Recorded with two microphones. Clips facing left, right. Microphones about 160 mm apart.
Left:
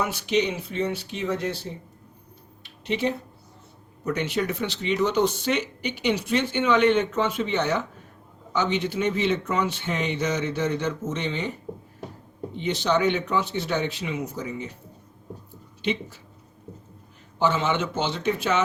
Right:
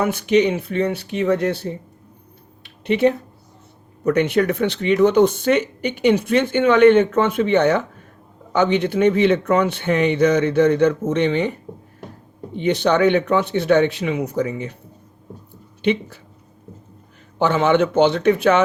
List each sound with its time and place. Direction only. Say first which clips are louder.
0.0 s speech: right 7 dB; 55° right (ahead or behind)
2.6 s a sound: right 9 dB; 60° right (ahead or behind)
4.0 s speech: right 9 dB; 60° right (ahead or behind)
12.5 s speech: right 7 dB; 60° right (ahead or behind)
15.8 s speech: right 8 dB; 60° right (ahead or behind)
17.4 s speech: right 7 dB; 60° right (ahead or behind)